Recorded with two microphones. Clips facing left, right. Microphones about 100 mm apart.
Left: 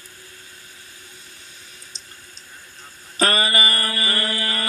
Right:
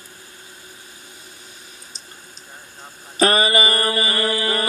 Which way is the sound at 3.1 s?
20° right (ahead or behind).